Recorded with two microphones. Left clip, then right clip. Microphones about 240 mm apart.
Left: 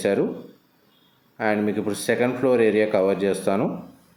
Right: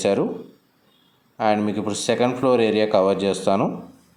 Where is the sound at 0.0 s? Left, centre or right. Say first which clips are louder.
Right 1 dB; centre.